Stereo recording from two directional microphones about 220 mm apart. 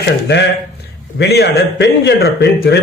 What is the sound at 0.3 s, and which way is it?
Speech, 50° left (ahead or behind).